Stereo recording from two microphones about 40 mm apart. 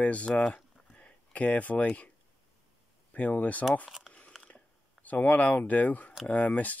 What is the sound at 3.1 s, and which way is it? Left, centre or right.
Speech, left.